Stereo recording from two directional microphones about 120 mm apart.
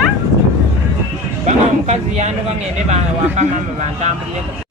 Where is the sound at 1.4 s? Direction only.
70° right (ahead or behind).